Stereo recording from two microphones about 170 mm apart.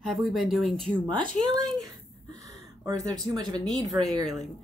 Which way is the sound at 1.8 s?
20° right (ahead or behind).